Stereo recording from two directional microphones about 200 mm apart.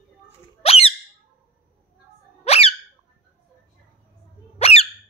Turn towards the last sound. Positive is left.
turn(degrees=30)  # may be behind; listen again after turning